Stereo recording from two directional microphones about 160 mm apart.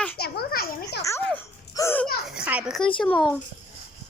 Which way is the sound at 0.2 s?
75° left (ahead or behind).